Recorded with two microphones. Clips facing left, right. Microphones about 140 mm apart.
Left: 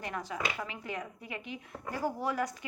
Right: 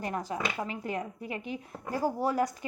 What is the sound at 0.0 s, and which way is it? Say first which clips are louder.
A woman's voice: right 3 dB; 40° right (ahead or behind).